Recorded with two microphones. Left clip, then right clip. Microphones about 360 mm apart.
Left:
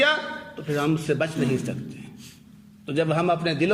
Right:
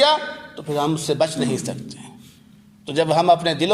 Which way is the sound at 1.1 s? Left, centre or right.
Centre.